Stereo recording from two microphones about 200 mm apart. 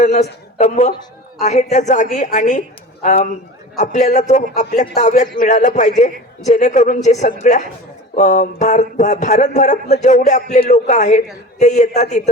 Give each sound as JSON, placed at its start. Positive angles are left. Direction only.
{"t": 0.0, "sound": "a man's voice", "side_deg": 35}